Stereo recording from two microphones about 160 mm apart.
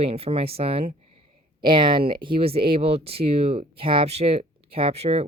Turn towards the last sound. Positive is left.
turn(degrees=-40)  # may be behind; listen again after turning